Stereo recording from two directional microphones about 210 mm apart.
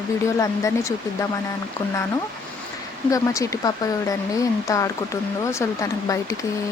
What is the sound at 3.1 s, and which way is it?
Speech, 15° left (ahead or behind).